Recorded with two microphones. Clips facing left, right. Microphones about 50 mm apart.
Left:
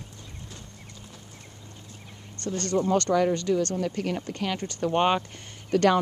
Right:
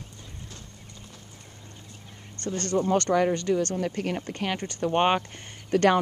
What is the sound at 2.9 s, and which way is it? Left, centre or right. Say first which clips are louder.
Speech: even; right.